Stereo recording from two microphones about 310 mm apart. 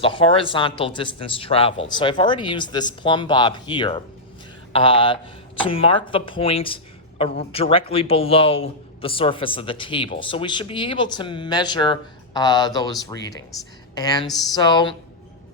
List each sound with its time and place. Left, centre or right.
0.0 s a man's voice: centre
14.3 s speech: centre
14.5 s a man's voice: centre